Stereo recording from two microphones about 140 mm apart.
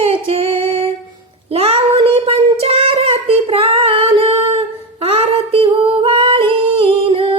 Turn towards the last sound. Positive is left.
turn(degrees=-40)  # may be behind; listen again after turning